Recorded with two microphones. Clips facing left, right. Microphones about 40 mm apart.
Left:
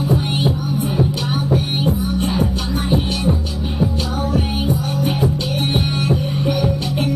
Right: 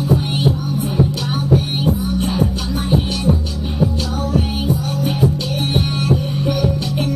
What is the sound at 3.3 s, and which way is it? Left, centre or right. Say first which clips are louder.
Music: right 3 dB; left.